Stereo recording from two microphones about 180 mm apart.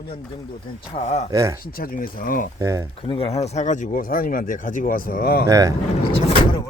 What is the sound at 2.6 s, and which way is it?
Speech, 15° right (ahead or behind).